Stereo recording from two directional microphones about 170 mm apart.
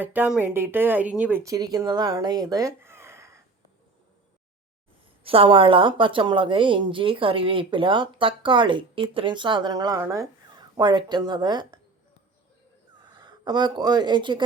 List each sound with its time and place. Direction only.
0.0 s speech: 10° right (ahead or behind)
1.5 s speech: 20° right (ahead or behind)
5.2 s a woman's voice: 35° right (ahead or behind)
13.0 s speech: 25° right (ahead or behind)